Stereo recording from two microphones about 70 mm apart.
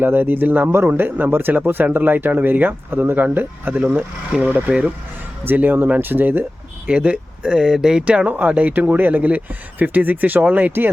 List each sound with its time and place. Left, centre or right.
0.0 s speech: right
6.8 s speech: centre